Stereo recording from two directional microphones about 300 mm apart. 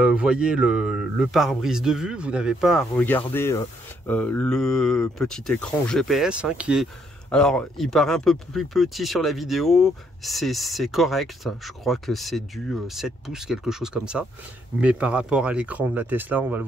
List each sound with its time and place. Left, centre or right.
0.0 s speech: centre